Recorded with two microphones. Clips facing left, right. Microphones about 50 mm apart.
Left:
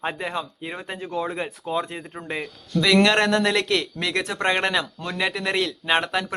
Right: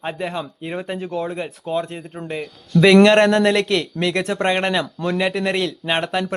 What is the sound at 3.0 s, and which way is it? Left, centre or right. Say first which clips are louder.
Speech: right 6 dB; centre.